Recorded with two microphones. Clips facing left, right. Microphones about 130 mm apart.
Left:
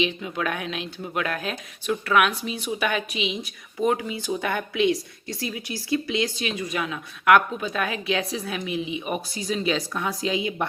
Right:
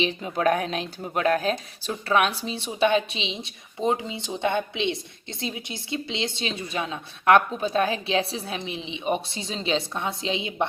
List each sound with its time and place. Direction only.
0.0 s speech: 35° right (ahead or behind)